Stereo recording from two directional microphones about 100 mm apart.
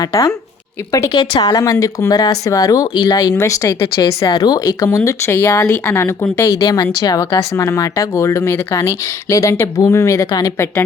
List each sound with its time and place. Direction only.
0.0 s speech: 30° left (ahead or behind)
1.1 s speech: 45° left (ahead or behind)
4.3 s a woman's voice: 40° left (ahead or behind)
7.3 s speech: 30° left (ahead or behind)